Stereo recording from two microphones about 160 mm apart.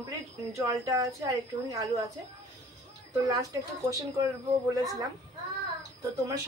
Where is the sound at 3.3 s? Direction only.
20° right (ahead or behind).